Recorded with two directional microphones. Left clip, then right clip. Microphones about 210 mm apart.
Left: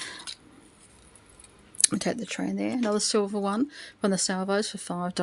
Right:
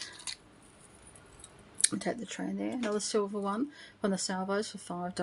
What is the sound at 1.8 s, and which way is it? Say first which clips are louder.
Speech: left 6 dB; 50° left (ahead or behind).